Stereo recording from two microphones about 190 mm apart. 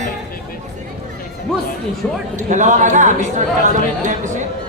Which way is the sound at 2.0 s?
10° left (ahead or behind).